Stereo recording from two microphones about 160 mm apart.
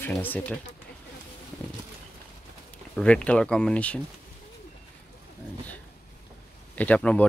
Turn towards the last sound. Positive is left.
turn(degrees=10)  # may be behind; listen again after turning